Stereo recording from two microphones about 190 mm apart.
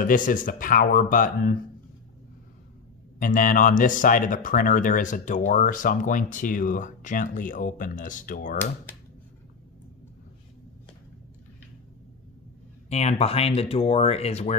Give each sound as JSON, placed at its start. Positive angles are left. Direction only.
{"t": 0.0, "sound": "speech", "side_deg": 45}
{"t": 3.2, "sound": "speech", "side_deg": 45}
{"t": 12.9, "sound": "speech", "side_deg": 35}